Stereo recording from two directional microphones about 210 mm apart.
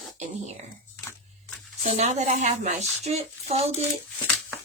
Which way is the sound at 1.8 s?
35° right (ahead or behind).